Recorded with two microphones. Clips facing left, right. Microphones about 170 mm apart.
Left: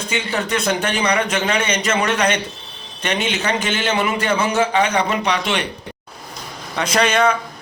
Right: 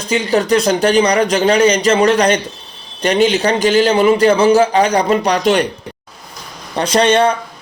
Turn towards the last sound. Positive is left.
turn(degrees=-30)  # may be behind; listen again after turning